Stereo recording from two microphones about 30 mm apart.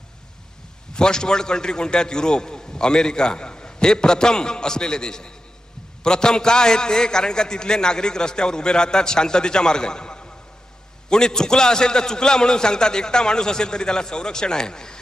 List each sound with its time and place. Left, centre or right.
0.9 s a man's voice: left